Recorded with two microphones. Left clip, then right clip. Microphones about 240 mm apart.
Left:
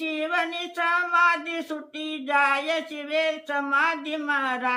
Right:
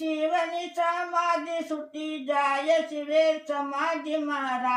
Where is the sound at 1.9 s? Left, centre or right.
Centre.